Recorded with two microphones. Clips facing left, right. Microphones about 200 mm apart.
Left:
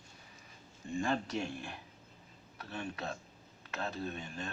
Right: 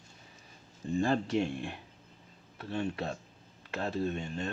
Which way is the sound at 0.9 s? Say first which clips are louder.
Right 5 dB; 35° right (ahead or behind).